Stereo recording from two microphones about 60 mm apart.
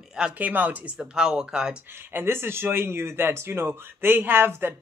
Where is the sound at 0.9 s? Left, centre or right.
Centre.